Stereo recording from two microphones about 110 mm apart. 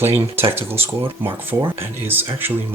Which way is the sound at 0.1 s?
20° right (ahead or behind).